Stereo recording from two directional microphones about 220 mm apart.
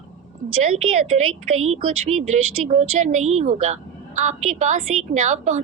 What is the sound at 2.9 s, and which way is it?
A woman's voice, 35° right (ahead or behind).